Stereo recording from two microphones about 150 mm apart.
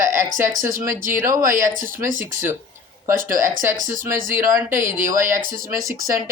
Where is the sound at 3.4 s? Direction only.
25° right (ahead or behind).